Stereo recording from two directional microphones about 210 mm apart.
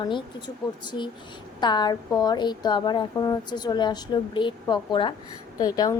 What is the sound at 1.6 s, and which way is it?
A woman's voice, 20° left (ahead or behind).